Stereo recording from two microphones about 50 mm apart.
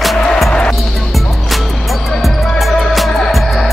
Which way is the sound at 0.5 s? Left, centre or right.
Centre.